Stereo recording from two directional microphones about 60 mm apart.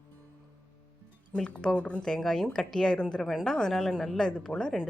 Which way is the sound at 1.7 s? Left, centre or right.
Left.